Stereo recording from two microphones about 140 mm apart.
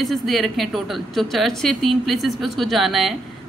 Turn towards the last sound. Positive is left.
turn(degrees=0)  # may be behind; listen again after turning